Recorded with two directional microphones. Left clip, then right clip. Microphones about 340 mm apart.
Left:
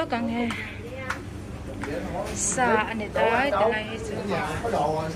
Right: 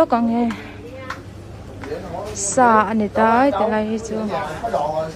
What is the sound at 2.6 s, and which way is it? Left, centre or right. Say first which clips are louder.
A woman's voice: right 9 dB; right.